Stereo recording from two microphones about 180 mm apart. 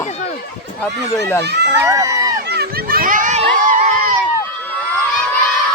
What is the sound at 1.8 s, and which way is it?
Speech, 15° right (ahead or behind).